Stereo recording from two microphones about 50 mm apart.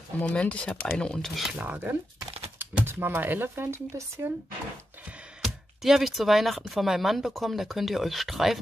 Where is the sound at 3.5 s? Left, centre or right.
Right.